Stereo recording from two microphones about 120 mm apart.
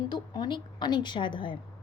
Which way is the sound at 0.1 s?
40° left (ahead or behind).